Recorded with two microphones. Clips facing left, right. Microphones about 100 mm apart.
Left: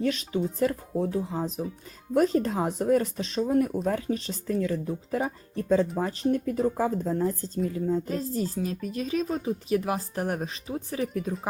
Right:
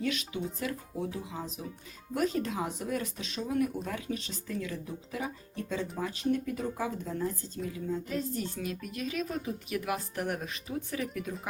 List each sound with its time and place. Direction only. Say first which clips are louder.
0.0 s speech: left 6 dB; 40° left (ahead or behind)